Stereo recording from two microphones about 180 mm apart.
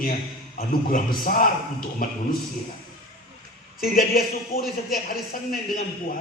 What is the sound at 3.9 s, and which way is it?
Speech, 55° left (ahead or behind).